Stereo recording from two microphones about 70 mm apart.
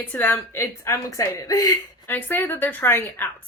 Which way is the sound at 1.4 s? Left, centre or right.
Left.